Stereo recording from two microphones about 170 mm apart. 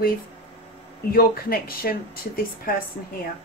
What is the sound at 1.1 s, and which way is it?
A woman's voice, 60° left (ahead or behind).